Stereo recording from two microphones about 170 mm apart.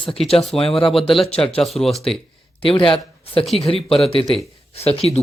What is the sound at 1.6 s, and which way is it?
Speech, centre (ahead or behind).